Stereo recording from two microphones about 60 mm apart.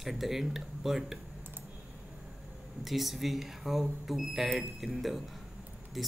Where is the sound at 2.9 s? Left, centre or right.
Centre.